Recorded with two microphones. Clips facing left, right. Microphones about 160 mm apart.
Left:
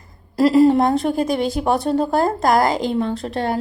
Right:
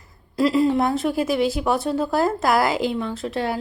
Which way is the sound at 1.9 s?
45° left (ahead or behind).